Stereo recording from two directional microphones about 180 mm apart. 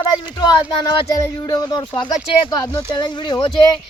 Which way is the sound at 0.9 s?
25° left (ahead or behind).